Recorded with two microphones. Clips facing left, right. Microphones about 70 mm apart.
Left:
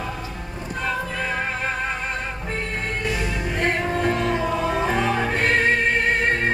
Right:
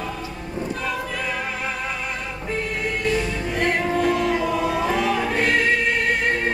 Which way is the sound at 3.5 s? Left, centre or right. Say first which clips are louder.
Right 2 dB; left.